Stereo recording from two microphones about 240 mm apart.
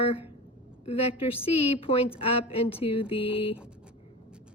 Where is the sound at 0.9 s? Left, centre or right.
Left.